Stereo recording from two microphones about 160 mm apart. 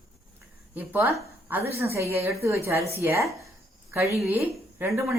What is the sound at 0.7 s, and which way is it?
Speech, 10° right (ahead or behind).